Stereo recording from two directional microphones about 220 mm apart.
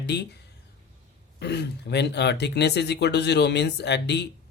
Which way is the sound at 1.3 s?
50° left (ahead or behind).